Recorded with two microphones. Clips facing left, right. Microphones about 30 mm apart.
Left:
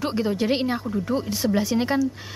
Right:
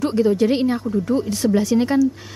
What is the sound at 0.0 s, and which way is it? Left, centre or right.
Speech, centre.